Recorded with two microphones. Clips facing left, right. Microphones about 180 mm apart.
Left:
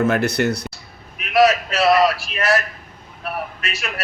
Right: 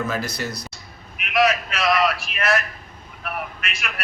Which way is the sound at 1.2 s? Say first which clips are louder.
Left 5 dB; 35° left (ahead or behind).